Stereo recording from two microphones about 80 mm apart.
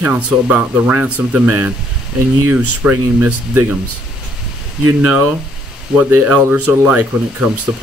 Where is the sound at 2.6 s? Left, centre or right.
Right.